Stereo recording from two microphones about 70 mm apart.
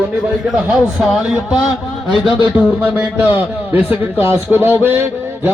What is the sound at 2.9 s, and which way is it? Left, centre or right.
A man's voice, right.